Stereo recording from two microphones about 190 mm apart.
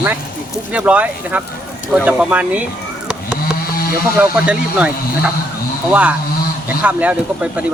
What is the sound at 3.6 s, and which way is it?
Snake, 50° left (ahead or behind).